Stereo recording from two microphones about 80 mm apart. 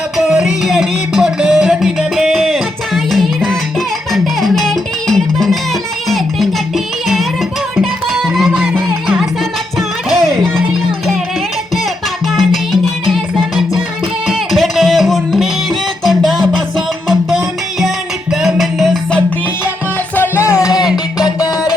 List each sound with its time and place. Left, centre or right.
0.2 s music: centre
12.3 s music: centre
17.7 s music: centre
20.1 s music: left
21.2 s music: left